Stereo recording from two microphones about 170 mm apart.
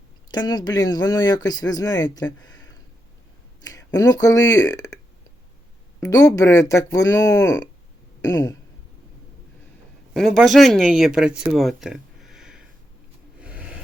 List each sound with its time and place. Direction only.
0.3 s speech: 25° left (ahead or behind)
6.0 s speech: 20° left (ahead or behind)
10.2 s speech: centre (ahead or behind)
11.5 s a sound: centre (ahead or behind)